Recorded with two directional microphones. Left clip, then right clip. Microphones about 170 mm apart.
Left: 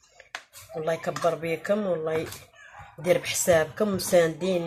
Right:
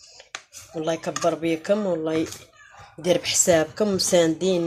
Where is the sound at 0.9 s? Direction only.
25° right (ahead or behind).